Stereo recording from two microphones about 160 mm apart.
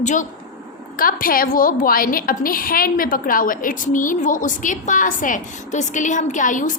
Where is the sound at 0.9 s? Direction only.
65° left (ahead or behind).